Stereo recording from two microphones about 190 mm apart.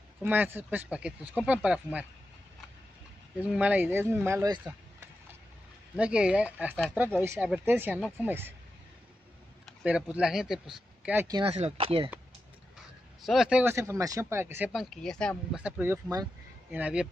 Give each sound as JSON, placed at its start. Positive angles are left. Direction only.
{"t": 0.2, "sound": "speech", "side_deg": -10}
{"t": 3.3, "sound": "speech", "side_deg": -5}
{"t": 5.9, "sound": "speech", "side_deg": -5}
{"t": 9.7, "sound": "speech", "side_deg": -5}
{"t": 11.2, "sound": "speech", "side_deg": -25}
{"t": 13.2, "sound": "speech", "side_deg": 0}
{"t": 15.5, "sound": "speech", "side_deg": -10}
{"t": 16.7, "sound": "speech", "side_deg": -5}